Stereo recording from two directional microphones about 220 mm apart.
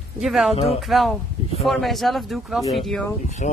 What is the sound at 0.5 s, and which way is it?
Speech, 25° left (ahead or behind).